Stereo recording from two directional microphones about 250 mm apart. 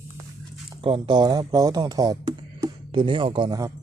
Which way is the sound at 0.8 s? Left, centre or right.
Right.